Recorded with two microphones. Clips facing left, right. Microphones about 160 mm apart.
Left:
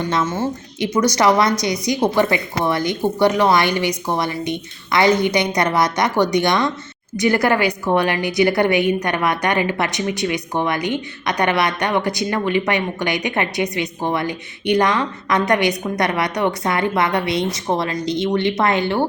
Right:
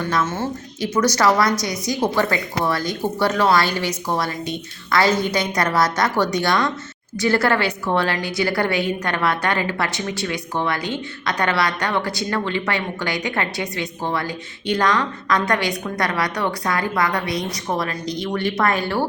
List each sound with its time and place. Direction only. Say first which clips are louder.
0.0 s a woman's voice: left 2 dB; 20° left (ahead or behind)